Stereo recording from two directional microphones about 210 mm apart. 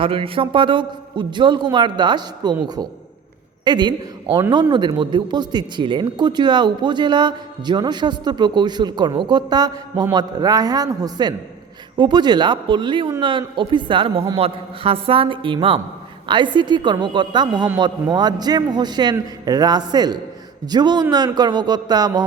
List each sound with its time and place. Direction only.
0.0 s a man's voice: 25° right (ahead or behind)
4.4 s speech: 10° right (ahead or behind)
4.7 s speech: 20° right (ahead or behind)